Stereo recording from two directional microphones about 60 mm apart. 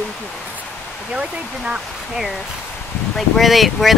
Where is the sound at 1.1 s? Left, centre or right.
Centre.